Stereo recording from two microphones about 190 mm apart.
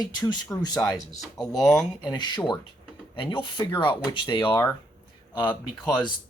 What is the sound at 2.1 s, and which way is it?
Speech, 20° left (ahead or behind).